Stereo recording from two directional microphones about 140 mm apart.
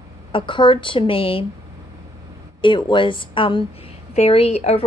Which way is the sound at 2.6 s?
35° left (ahead or behind).